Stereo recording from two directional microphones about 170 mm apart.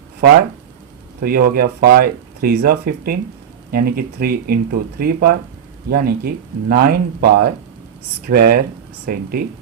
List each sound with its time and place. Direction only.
1.2 s speech: 60° right (ahead or behind)